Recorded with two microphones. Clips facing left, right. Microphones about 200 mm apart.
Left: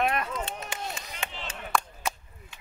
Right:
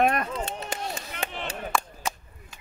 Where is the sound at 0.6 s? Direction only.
40° right (ahead or behind).